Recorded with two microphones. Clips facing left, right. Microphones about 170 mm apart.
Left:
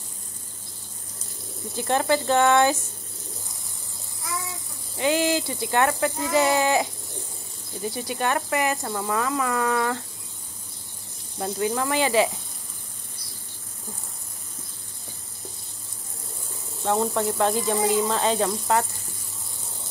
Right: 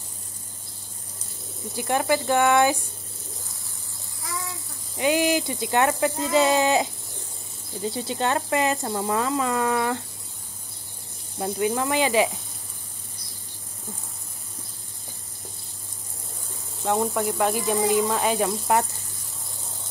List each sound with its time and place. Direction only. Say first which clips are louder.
1.8 s speech: left 1 dB; 15° right (ahead or behind)
4.9 s speech: right 1 dB; 15° right (ahead or behind)
11.3 s speech: right 1 dB; 20° right (ahead or behind)
16.9 s speech: even; 10° right (ahead or behind)